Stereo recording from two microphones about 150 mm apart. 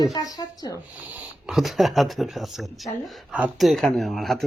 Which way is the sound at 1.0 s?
10° right (ahead or behind).